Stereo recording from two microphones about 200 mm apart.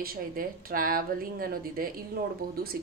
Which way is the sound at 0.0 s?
45° right (ahead or behind).